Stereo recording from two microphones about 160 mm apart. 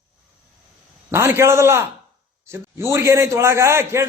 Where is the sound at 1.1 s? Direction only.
15° right (ahead or behind).